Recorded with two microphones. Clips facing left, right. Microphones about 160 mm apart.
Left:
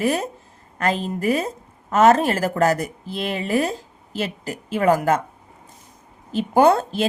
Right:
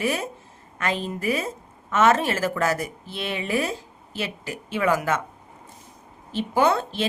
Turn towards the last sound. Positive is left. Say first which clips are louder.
# left 5 dB
turn(degrees=40)  # may be behind; listen again after turning